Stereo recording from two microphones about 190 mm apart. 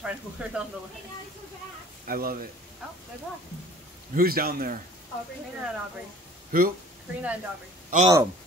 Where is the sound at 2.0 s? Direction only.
50° right (ahead or behind).